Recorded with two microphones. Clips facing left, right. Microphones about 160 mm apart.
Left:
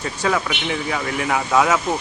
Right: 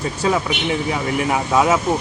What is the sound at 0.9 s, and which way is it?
Speech, 20° right (ahead or behind).